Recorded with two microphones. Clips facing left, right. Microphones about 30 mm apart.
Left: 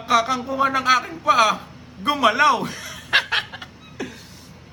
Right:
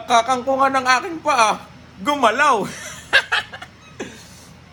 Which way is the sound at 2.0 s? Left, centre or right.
Left.